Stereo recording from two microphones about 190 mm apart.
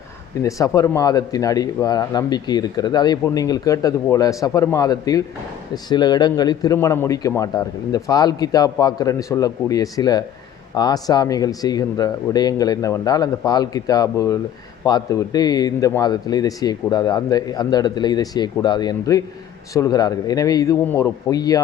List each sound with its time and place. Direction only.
0.4 s a man's voice: 15° left (ahead or behind)